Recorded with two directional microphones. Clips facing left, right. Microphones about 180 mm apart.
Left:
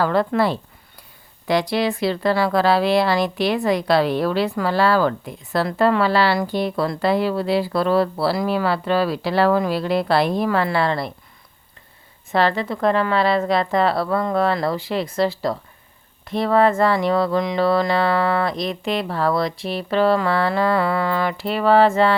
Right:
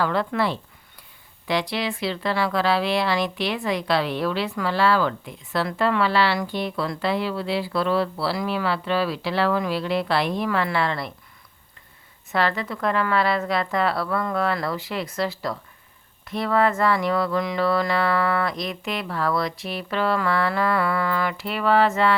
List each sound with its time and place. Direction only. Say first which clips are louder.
0.0 s speech: left 4 dB; 40° left (ahead or behind)
12.3 s speech: left 4 dB; 30° left (ahead or behind)